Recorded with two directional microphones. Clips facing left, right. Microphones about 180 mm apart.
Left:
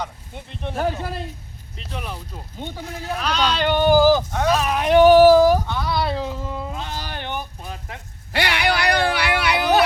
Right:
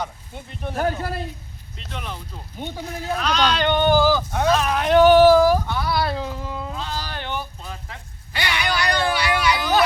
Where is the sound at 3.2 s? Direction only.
5° left (ahead or behind).